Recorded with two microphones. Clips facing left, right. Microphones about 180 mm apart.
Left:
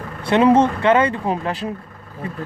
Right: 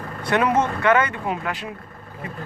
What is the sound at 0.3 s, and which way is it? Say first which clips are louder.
Speech: left 6 dB; 30° left (ahead or behind).